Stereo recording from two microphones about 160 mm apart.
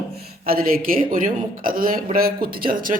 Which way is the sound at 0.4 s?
65° right (ahead or behind).